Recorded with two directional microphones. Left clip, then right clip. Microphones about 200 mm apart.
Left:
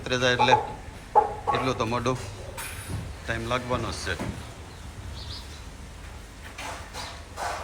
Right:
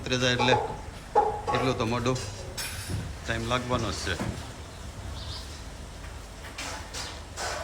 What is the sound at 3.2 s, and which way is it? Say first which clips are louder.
Speech: left 1 dB; centre (ahead or behind).